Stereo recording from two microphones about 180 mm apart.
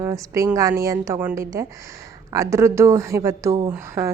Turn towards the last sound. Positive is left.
turn(degrees=-15)  # may be behind; listen again after turning